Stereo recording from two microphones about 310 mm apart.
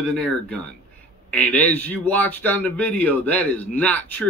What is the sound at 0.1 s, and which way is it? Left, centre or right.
Speech, centre.